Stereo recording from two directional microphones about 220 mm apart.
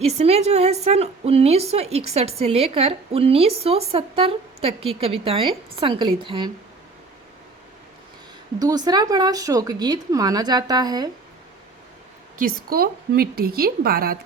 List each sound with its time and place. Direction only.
0.0 s a woman's voice: 30° right (ahead or behind)
8.5 s speech: 15° right (ahead or behind)
12.4 s a woman's voice: 45° right (ahead or behind)